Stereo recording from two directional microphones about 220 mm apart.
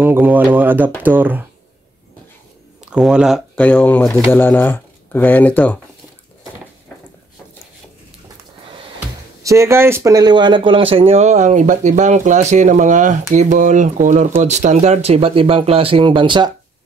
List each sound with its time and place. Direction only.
0.0 s speech: 10° right (ahead or behind)
2.8 s speech: 5° right (ahead or behind)
9.4 s speech: 15° right (ahead or behind)